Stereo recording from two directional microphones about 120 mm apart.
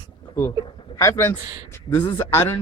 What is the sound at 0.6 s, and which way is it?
A man's voice, 30° left (ahead or behind).